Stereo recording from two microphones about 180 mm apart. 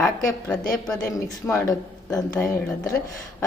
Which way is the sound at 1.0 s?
15° left (ahead or behind).